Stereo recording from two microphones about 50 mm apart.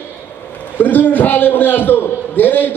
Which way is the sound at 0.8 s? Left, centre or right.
Left.